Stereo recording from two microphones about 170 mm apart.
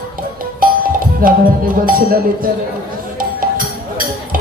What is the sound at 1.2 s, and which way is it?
Music, 55° right (ahead or behind).